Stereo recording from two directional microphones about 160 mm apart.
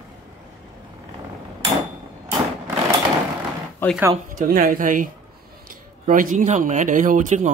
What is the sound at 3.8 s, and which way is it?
Speech, 15° left (ahead or behind).